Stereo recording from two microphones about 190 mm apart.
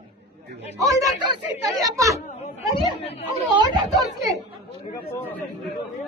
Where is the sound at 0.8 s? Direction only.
15° right (ahead or behind).